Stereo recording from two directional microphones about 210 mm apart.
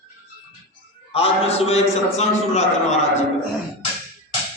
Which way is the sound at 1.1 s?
30° left (ahead or behind).